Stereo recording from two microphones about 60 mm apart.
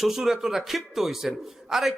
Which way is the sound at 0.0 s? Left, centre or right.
Centre.